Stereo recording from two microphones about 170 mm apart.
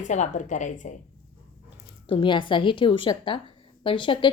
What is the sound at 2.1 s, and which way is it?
A woman's voice, 30° left (ahead or behind).